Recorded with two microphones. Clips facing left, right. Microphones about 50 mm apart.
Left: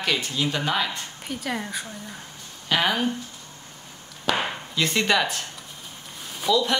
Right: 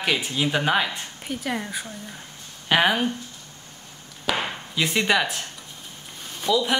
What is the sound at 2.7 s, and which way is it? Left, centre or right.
Speech, centre.